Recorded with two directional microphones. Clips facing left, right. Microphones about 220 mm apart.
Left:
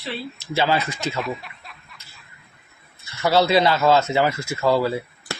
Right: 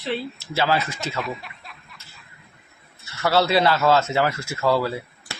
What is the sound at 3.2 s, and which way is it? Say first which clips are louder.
Speech: left 2 dB; centre (ahead or behind).